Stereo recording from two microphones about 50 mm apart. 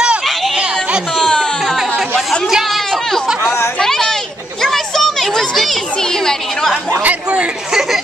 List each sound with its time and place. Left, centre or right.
1.2 s music: centre
1.8 s chatter: centre
3.8 s children playing: centre
7.0 s speech: right